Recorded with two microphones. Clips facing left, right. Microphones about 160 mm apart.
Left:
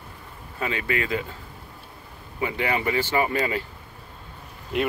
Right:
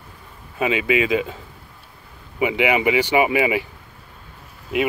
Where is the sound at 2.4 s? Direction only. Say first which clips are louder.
Right 7 dB; 90° right.